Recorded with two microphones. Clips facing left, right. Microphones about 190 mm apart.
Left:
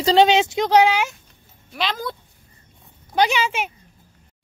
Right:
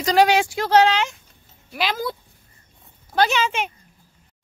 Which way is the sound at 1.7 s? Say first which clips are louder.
Right 1 dB; 5° right (ahead or behind).